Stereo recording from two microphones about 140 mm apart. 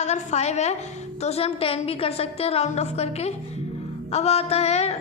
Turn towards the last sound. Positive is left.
turn(degrees=50)  # may be behind; listen again after turning